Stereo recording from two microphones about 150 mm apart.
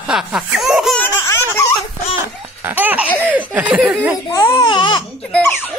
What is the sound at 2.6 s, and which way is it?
Laughter, 15° right (ahead or behind).